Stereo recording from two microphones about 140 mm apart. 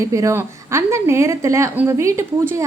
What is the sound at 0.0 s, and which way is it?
A woman's voice, 20° right (ahead or behind).